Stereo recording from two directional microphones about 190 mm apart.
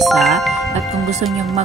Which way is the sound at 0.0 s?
Centre (ahead or behind).